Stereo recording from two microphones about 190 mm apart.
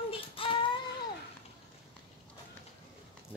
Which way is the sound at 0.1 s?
25° left (ahead or behind).